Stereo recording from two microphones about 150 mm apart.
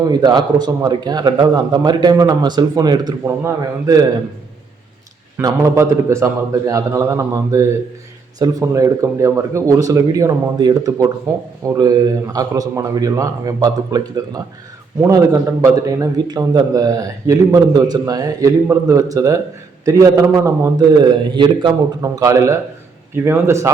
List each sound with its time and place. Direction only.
0.0 s a man's voice: 25° right (ahead or behind)
5.4 s a man's voice: 20° right (ahead or behind)